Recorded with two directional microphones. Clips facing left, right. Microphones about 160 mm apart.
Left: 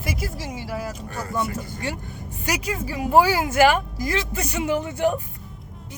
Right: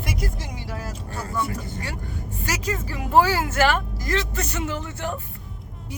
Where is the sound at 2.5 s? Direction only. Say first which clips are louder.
Left 2 dB; 10° left (ahead or behind).